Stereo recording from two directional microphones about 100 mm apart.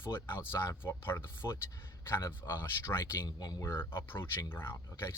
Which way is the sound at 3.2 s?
40° left (ahead or behind).